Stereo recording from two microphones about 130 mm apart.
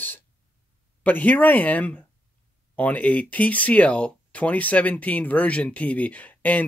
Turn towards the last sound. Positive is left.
turn(degrees=10)  # may be behind; listen again after turning